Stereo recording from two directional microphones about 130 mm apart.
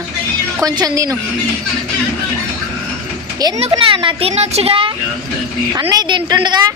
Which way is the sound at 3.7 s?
40° right (ahead or behind).